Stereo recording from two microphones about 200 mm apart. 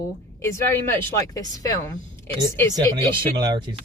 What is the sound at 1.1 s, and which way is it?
Speech, 15° left (ahead or behind).